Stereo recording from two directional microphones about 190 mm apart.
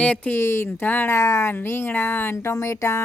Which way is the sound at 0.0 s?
10° left (ahead or behind).